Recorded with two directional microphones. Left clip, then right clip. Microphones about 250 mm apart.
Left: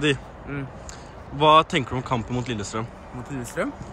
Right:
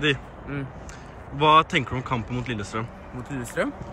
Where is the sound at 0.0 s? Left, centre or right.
Centre.